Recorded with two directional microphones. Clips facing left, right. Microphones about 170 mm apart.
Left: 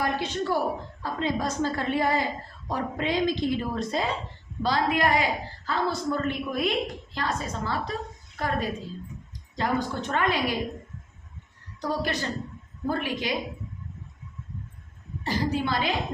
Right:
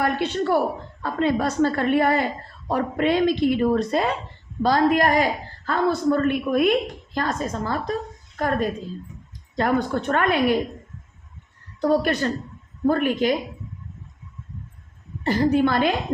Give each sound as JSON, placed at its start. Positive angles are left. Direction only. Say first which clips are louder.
{"t": 0.0, "sound": "a woman's voice", "louder": "right 5 dB", "side_deg": -60}
{"t": 4.6, "sound": "a man's voice", "louder": "right 6 dB", "side_deg": -45}
{"t": 9.6, "sound": "a woman's voice", "louder": "right 6 dB", "side_deg": -55}
{"t": 11.8, "sound": "a woman's voice", "louder": "right 8 dB", "side_deg": -55}
{"t": 15.2, "sound": "a man's voice", "louder": "right 8 dB", "side_deg": -55}